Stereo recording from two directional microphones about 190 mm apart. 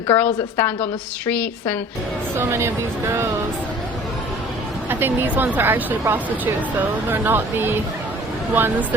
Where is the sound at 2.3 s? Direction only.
10° right (ahead or behind).